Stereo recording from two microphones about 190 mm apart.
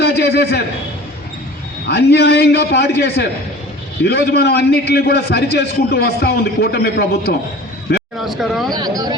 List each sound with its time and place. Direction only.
0.0 s a man's voice: 60° left (ahead or behind)
1.9 s a man's voice: 60° left (ahead or behind)
8.2 s speech: centre (ahead or behind)
8.7 s speech: 20° right (ahead or behind)